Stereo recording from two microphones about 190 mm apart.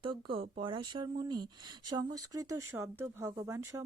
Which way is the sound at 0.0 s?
25° right (ahead or behind).